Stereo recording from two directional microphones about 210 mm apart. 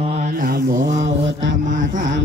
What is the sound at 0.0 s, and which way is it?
Mantra, 40° right (ahead or behind).